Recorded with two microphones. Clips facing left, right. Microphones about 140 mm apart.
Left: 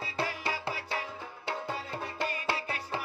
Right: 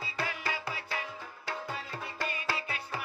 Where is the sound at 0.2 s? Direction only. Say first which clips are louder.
Left 2 dB; 30° left (ahead or behind).